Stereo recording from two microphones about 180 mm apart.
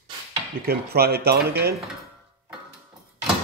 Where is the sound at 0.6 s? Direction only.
60° right (ahead or behind).